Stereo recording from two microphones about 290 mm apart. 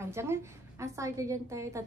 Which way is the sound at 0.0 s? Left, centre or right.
Centre.